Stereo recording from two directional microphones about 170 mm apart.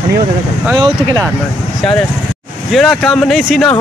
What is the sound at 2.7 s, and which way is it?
Speech, centre (ahead or behind).